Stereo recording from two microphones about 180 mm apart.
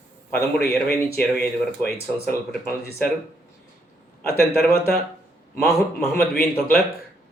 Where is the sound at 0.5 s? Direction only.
60° left (ahead or behind).